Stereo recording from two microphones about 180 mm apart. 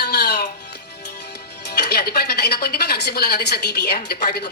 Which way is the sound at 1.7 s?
65° left (ahead or behind).